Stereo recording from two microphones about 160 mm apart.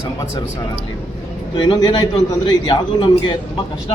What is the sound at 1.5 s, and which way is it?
Speech, 30° left (ahead or behind).